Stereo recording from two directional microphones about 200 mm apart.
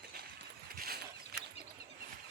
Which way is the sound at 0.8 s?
50° right (ahead or behind).